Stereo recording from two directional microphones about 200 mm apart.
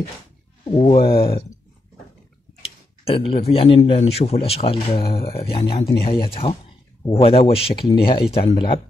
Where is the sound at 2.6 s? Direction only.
30° left (ahead or behind).